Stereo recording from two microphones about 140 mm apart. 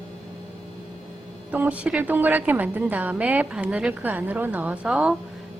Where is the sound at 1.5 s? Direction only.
10° right (ahead or behind).